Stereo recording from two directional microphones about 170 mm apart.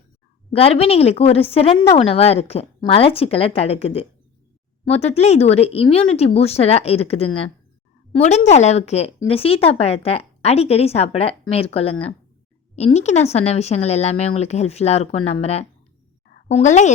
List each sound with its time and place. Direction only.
0.5 s a woman's voice: 35° left (ahead or behind)